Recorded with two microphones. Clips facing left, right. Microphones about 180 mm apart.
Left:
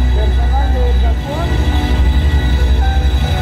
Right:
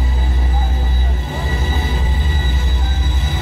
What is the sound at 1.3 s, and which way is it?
Music, 70° left (ahead or behind).